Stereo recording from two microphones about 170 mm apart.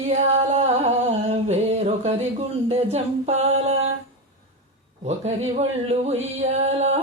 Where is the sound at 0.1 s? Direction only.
40° right (ahead or behind).